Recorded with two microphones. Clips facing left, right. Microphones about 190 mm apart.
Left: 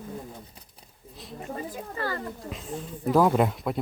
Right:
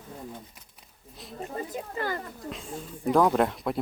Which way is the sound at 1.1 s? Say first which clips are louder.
Left 1 dB; centre (ahead or behind).